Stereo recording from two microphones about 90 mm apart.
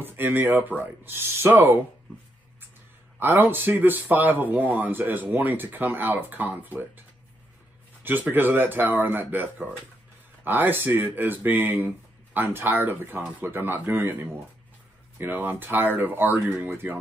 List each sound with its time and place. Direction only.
0.0 s speech: 20° right (ahead or behind)
3.2 s speech: 25° right (ahead or behind)
8.0 s speech: 20° right (ahead or behind)